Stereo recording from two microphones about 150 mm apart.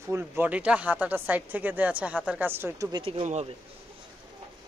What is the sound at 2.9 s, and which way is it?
Speech, 35° right (ahead or behind).